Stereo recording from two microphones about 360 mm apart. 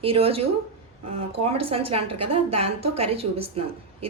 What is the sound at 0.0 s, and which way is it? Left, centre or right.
Speech, centre.